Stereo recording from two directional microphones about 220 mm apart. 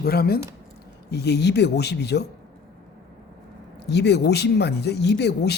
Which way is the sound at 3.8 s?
50° left (ahead or behind).